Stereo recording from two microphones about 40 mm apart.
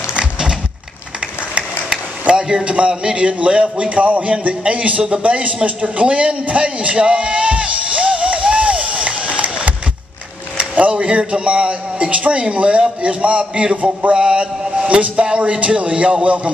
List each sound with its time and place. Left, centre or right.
0.1 s a sound: centre
2.6 s a man's voice: right
5.2 s a sound: right
10.6 s a man's voice: right
14.1 s mantra: right
14.9 s a man's voice: right